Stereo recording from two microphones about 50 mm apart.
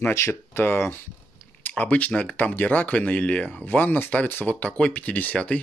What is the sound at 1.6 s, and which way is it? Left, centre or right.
Speech, left.